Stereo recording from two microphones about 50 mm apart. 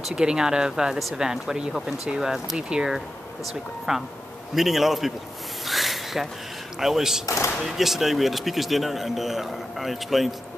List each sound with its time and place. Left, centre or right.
0.1 s speech: centre
5.7 s a sound: centre
6.8 s speech: centre
7.2 s speech: left
7.6 s speech: centre